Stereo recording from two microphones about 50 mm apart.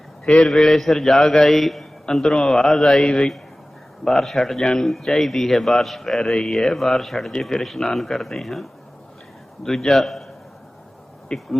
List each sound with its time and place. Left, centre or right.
0.3 s a man's voice: centre
2.3 s a man's voice: centre
3.0 s a man's voice: centre
4.0 s a man's voice: centre
6.3 s a man's voice: centre
6.6 s a man's voice: centre
9.6 s a man's voice: centre
11.3 s speech: centre